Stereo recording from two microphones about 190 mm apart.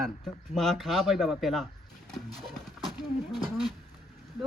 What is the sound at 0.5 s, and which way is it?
Speech, centre (ahead or behind).